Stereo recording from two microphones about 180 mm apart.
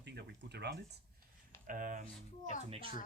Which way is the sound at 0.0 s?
70° right (ahead or behind).